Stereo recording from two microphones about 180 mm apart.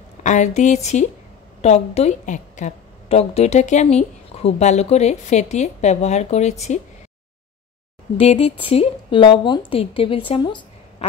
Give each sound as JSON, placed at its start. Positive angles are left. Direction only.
{"t": 0.2, "sound": "a woman's voice", "side_deg": 40}
{"t": 8.2, "sound": "a woman's voice", "side_deg": 35}